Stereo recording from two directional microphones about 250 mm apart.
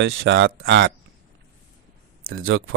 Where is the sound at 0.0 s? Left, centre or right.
Right.